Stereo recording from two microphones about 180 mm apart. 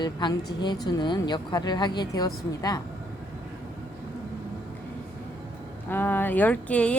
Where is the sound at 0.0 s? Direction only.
25° left (ahead or behind).